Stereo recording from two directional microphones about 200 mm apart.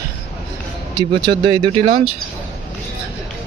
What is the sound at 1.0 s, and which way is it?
Speech, 25° right (ahead or behind).